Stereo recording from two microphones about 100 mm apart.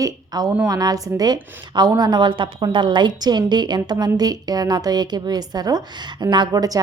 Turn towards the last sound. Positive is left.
turn(degrees=-40)  # may be behind; listen again after turning